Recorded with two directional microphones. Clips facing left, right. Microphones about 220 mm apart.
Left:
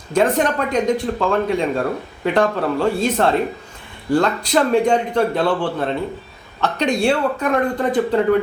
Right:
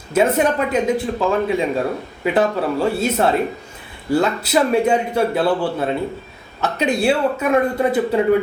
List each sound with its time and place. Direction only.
0.1 s a man's voice: 5° right (ahead or behind)